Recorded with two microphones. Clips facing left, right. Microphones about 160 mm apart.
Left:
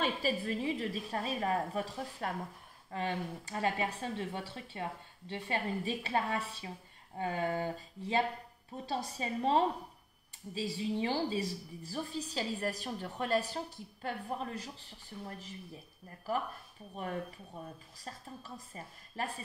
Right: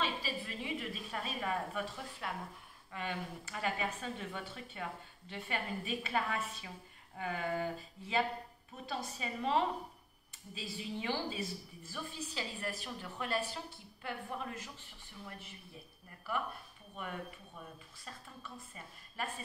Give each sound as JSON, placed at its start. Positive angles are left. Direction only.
{"t": 0.0, "sound": "a woman's voice", "side_deg": 45}
{"t": 16.9, "sound": "a woman's voice", "side_deg": 35}